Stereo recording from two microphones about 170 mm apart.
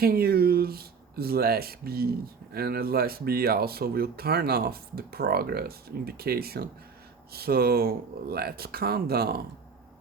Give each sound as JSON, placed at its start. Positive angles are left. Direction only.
{"t": 0.0, "sound": "speech", "side_deg": -65}